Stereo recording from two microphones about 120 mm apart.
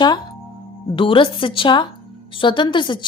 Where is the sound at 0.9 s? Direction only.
45° left (ahead or behind).